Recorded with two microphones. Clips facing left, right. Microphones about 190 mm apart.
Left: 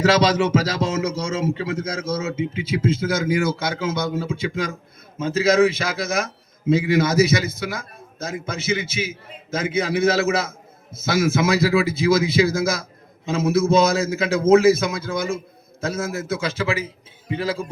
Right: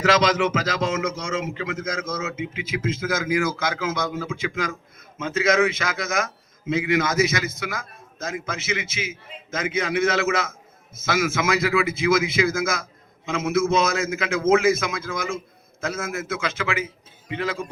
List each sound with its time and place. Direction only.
0.0 s a man's voice: 35° left (ahead or behind)